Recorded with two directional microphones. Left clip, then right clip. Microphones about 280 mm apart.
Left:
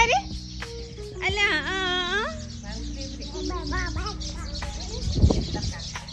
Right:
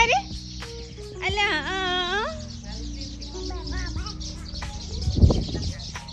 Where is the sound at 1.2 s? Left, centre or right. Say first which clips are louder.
Even; centre.